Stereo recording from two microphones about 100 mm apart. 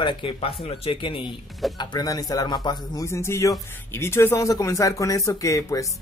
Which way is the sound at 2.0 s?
40° left (ahead or behind).